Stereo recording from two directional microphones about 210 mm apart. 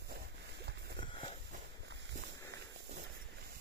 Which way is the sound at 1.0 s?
25° left (ahead or behind).